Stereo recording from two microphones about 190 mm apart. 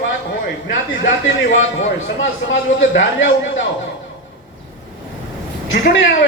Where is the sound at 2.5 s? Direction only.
75° left (ahead or behind).